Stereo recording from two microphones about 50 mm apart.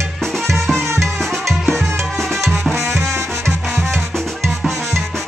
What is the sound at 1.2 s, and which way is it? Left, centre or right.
Music, centre.